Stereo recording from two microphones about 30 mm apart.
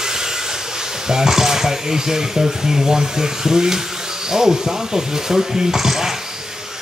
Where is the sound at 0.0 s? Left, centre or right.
Centre.